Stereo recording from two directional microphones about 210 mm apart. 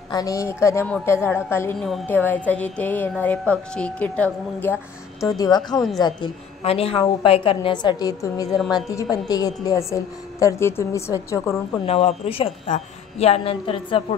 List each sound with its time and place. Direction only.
0.1 s a woman's voice: 15° left (ahead or behind)
11.8 s a woman's voice: 30° left (ahead or behind)